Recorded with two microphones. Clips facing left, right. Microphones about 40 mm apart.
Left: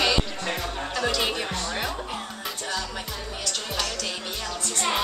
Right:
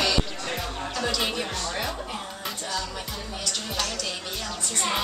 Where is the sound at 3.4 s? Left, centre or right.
Centre.